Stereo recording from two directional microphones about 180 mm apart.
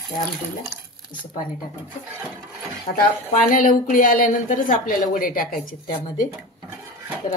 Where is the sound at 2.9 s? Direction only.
50° left (ahead or behind).